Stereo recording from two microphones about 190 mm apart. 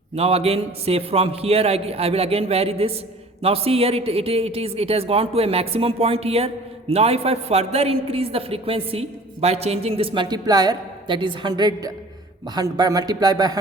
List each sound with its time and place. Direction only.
0.2 s a man's voice: 30° right (ahead or behind)